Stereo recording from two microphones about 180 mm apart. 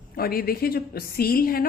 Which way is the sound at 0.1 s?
55° left (ahead or behind).